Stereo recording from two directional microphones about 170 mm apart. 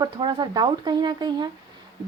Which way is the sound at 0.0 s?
25° right (ahead or behind).